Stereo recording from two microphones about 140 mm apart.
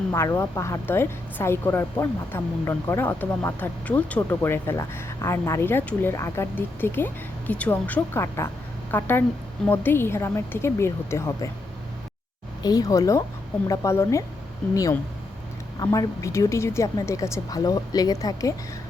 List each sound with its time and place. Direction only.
0.1 s a woman's voice: 20° left (ahead or behind)
12.6 s a woman's voice: 25° left (ahead or behind)
15.8 s a woman's voice: 25° left (ahead or behind)